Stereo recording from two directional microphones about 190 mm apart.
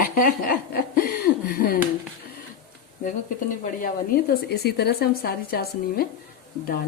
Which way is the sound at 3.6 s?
50° left (ahead or behind).